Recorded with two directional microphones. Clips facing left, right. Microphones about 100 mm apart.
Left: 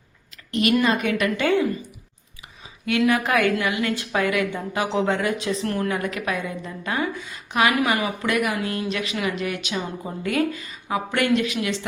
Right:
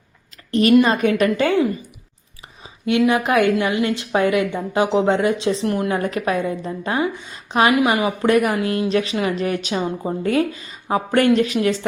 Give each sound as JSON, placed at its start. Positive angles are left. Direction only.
{"t": 0.7, "sound": "a woman's voice", "side_deg": -30}
{"t": 3.1, "sound": "a woman's voice", "side_deg": -20}
{"t": 5.9, "sound": "a woman's voice", "side_deg": -35}